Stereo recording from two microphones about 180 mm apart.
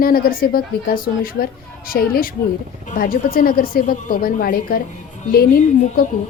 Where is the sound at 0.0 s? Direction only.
55° left (ahead or behind).